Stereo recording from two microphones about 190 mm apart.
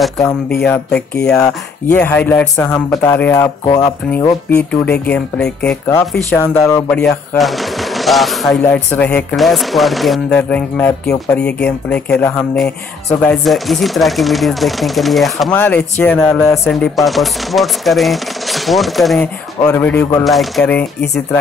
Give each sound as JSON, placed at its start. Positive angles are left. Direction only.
{"t": 1.2, "sound": "speech", "side_deg": 5}
{"t": 4.1, "sound": "speech", "side_deg": 10}
{"t": 6.9, "sound": "speech", "side_deg": 5}